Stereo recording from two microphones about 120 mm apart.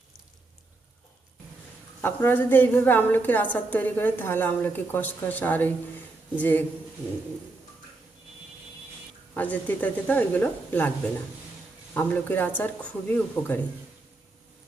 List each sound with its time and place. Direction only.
2.0 s a woman's voice: 15° left (ahead or behind)
9.3 s a woman's voice: 15° left (ahead or behind)
11.9 s a woman's voice: 15° left (ahead or behind)